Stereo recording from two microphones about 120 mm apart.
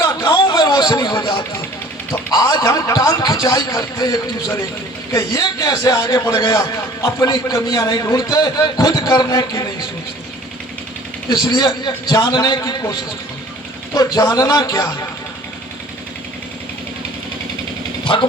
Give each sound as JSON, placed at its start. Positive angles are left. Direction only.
{"t": 0.3, "sound": "a sound", "side_deg": 45}
{"t": 2.3, "sound": "a man's voice", "side_deg": 35}
{"t": 5.9, "sound": "a man's voice", "side_deg": 40}
{"t": 7.0, "sound": "a man's voice", "side_deg": 30}
{"t": 11.3, "sound": "a man's voice", "side_deg": 40}
{"t": 13.9, "sound": "a man's voice", "side_deg": 35}
{"t": 18.0, "sound": "speech", "side_deg": 45}